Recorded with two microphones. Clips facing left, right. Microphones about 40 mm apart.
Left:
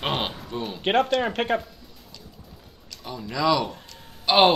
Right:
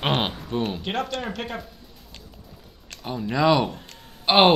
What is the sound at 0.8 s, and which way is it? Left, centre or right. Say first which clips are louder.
Speech: left 7 dB; left.